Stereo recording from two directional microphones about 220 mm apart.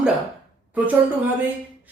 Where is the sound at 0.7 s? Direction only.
5° right (ahead or behind).